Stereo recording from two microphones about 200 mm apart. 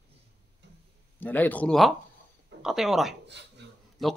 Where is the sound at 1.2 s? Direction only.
10° left (ahead or behind).